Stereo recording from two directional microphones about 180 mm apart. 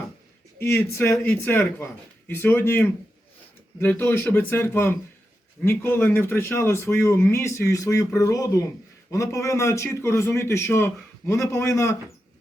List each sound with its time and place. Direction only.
0.6 s speech: 15° left (ahead or behind)